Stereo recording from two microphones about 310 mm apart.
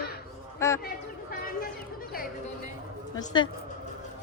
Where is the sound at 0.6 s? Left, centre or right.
Centre.